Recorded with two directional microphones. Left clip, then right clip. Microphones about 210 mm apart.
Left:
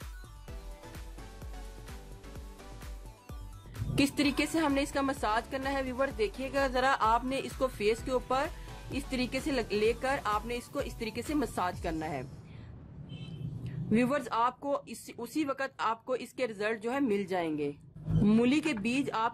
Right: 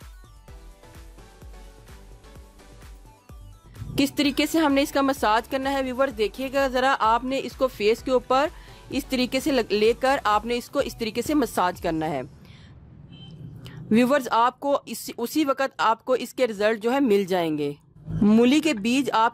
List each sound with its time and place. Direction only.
3.9 s a woman's voice: 40° right (ahead or behind)
13.7 s speech: 45° right (ahead or behind)